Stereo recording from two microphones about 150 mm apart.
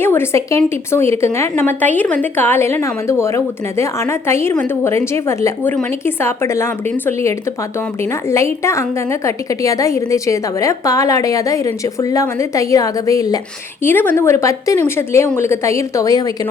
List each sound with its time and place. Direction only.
0.0 s a woman's voice: 15° left (ahead or behind)
13.8 s a woman's voice: 15° left (ahead or behind)